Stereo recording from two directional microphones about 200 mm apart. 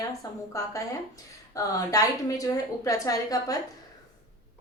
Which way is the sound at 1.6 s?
15° left (ahead or behind).